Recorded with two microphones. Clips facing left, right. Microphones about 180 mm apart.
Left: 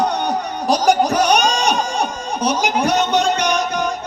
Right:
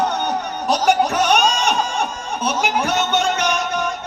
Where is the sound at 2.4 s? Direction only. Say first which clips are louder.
Left 3 dB; 35° left (ahead or behind).